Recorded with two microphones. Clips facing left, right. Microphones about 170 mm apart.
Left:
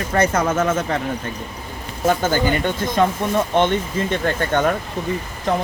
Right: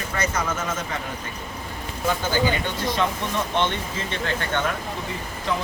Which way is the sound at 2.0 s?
45° left (ahead or behind).